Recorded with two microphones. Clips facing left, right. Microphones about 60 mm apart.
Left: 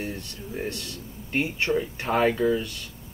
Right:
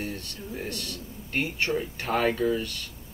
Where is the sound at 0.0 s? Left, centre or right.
Left.